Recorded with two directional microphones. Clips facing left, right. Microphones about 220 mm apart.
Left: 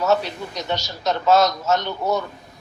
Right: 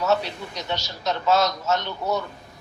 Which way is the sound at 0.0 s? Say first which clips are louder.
Left 3 dB; 45° left (ahead or behind).